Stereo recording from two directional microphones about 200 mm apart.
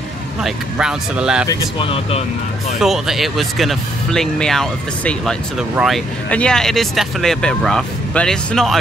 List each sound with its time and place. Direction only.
0.4 s speech: 5° right (ahead or behind)
1.5 s speech: 25° left (ahead or behind)
2.8 s speech: centre (ahead or behind)